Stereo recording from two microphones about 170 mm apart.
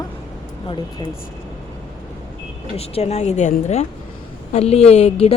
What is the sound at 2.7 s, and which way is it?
Speech, 35° left (ahead or behind).